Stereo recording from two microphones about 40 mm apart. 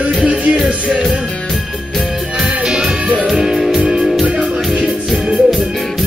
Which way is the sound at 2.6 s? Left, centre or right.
Centre.